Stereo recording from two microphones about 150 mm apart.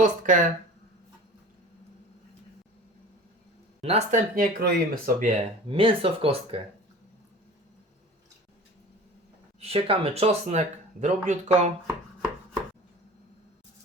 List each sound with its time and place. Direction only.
0.0 s speech: 60° right (ahead or behind)
3.8 s speech: 45° right (ahead or behind)
4.4 s speech: 70° right (ahead or behind)
5.6 s speech: 35° right (ahead or behind)
9.6 s speech: 40° right (ahead or behind)